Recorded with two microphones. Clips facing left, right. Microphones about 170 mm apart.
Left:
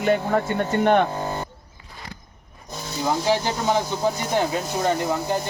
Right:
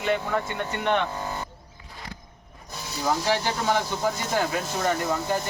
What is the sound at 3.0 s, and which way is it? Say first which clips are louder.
Speech: left 3 dB; 20° left (ahead or behind).